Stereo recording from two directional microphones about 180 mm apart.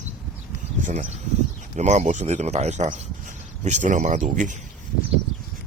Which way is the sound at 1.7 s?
40° right (ahead or behind).